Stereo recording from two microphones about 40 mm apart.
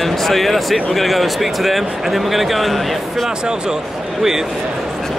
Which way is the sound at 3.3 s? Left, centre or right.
Centre.